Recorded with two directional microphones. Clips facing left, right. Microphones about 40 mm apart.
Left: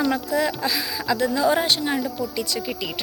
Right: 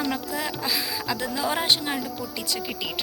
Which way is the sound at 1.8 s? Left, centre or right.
Centre.